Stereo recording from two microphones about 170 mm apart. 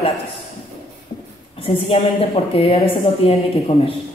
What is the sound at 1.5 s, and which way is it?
A woman's voice, 30° left (ahead or behind).